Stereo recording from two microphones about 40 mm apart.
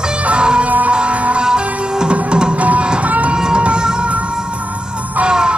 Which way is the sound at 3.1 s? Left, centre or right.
Right.